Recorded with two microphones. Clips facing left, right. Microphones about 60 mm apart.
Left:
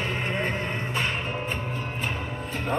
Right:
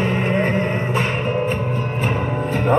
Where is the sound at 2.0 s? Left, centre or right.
Right.